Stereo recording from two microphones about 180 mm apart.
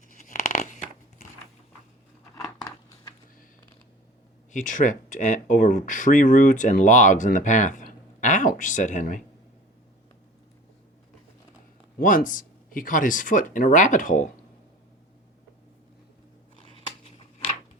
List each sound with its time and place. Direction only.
0.1 s a sound: 45° left (ahead or behind)
4.5 s speech: 45° left (ahead or behind)
11.9 s speech: 50° left (ahead or behind)